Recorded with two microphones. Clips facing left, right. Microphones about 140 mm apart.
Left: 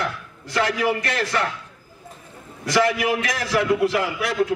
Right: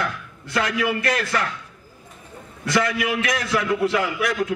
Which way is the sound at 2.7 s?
30° left (ahead or behind).